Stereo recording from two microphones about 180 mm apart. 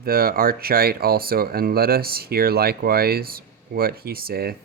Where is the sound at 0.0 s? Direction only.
55° right (ahead or behind).